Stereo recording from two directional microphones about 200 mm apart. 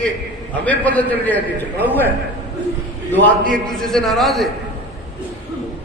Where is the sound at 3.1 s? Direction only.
10° left (ahead or behind).